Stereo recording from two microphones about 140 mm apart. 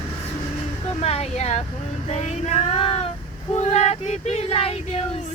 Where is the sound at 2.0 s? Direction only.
50° left (ahead or behind).